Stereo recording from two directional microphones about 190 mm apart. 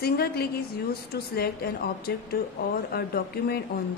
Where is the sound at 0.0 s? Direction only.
55° left (ahead or behind).